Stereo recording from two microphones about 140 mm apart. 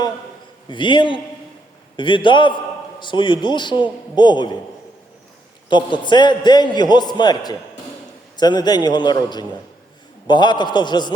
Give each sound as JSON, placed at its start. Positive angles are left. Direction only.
{"t": 0.7, "sound": "a man's voice", "side_deg": 35}
{"t": 5.6, "sound": "a man's voice", "side_deg": 35}